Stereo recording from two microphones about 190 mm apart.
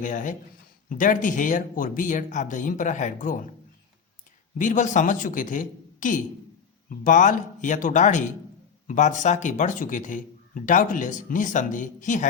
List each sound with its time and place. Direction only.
0.0 s speech: 45° left (ahead or behind)
4.5 s speech: 40° left (ahead or behind)